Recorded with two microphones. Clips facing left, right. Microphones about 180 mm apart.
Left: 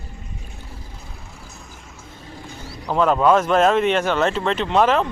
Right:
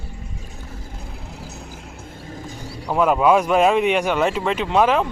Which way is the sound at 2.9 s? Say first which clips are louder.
Even; 10° right (ahead or behind).